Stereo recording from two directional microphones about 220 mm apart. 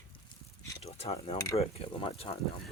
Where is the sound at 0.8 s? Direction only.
30° left (ahead or behind).